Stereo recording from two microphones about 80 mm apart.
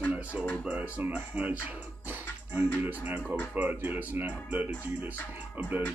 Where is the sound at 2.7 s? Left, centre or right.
Right.